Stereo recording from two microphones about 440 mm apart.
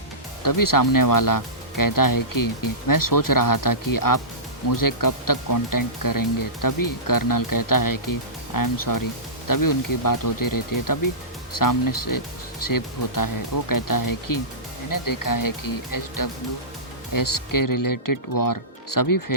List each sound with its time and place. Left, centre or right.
0.4 s speech: left